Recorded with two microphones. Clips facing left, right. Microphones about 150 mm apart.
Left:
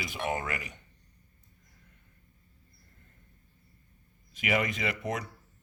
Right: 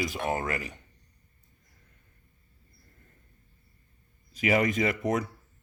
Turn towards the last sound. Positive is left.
turn(degrees=-45)  # may be behind; listen again after turning